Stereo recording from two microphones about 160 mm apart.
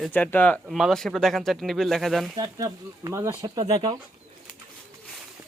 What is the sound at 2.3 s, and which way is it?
Speech, 20° right (ahead or behind).